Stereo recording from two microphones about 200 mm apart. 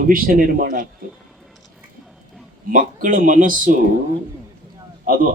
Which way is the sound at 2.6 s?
45° right (ahead or behind).